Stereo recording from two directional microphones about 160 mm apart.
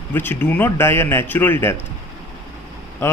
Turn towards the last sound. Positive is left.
turn(degrees=15)  # may be behind; listen again after turning